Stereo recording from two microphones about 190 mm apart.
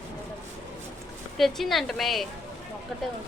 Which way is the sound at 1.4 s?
Centre (ahead or behind).